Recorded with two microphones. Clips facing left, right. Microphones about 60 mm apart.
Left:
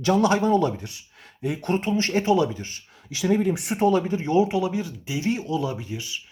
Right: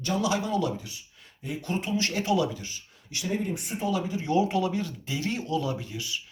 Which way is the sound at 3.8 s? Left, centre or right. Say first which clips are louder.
Left 9 dB; left.